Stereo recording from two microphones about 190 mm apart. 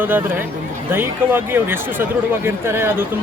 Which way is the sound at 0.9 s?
10° right (ahead or behind).